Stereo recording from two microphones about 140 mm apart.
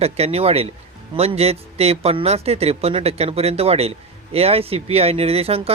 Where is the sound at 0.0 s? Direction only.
45° right (ahead or behind).